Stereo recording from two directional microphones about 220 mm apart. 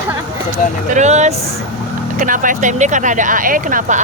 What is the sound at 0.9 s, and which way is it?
Speech, 30° right (ahead or behind).